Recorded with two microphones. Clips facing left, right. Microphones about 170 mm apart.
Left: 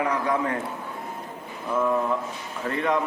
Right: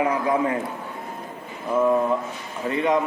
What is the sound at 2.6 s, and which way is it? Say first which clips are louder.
Speech: right 3 dB; 5° right (ahead or behind).